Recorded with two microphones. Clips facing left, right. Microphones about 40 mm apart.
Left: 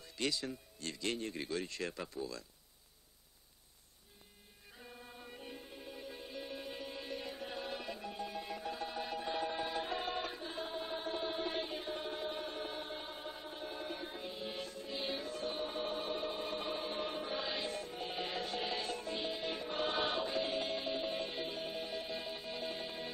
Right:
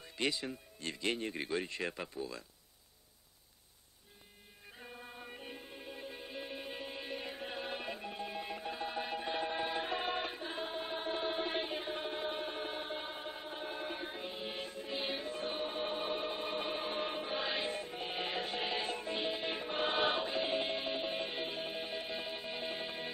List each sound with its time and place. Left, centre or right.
0.0 s speech: right
4.7 s music: right